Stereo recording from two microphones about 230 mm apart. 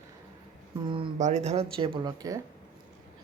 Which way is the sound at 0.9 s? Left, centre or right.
Right.